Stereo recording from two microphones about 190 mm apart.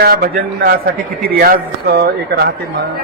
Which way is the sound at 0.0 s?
50° right (ahead or behind).